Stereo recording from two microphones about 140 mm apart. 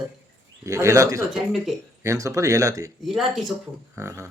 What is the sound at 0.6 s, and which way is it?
Speech, 20° right (ahead or behind).